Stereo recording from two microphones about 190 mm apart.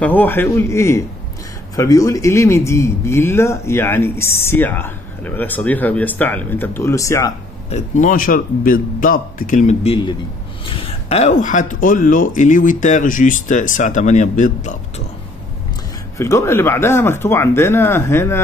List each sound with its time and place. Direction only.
0.0 s a man's voice: 10° left (ahead or behind)
7.7 s a man's voice: 40° left (ahead or behind)
10.6 s speech: 25° left (ahead or behind)
16.2 s a man's voice: 15° left (ahead or behind)